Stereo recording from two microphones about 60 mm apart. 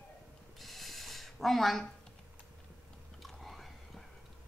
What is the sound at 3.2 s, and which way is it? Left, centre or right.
Whispering, centre.